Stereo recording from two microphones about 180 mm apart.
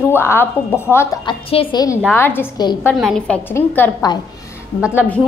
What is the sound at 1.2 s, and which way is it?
Speech, 30° left (ahead or behind).